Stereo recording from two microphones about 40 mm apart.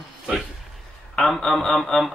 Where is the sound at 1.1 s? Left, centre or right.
Centre.